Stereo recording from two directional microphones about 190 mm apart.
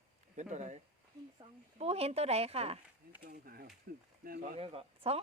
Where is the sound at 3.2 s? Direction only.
50° right (ahead or behind).